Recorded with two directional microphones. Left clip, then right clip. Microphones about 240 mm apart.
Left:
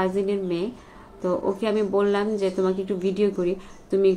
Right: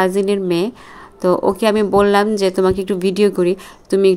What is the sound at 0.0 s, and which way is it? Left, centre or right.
Speech, right.